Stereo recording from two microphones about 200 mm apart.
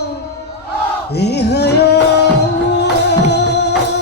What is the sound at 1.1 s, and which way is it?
Music, 55° left (ahead or behind).